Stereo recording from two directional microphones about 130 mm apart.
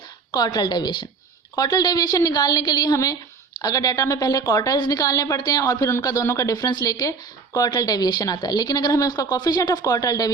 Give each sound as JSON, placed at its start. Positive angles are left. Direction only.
{"t": 0.3, "sound": "a woman's voice", "side_deg": 30}